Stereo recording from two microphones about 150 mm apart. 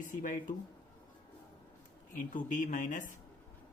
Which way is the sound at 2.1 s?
60° left (ahead or behind).